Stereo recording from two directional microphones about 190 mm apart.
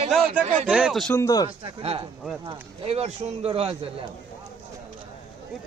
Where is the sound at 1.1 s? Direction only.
15° left (ahead or behind).